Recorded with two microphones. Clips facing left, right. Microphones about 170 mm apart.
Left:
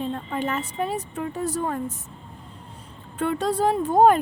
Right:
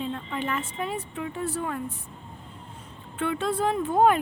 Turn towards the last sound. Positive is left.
turn(degrees=40)  # may be behind; listen again after turning